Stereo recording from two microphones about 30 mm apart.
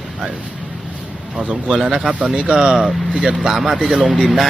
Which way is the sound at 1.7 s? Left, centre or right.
Right.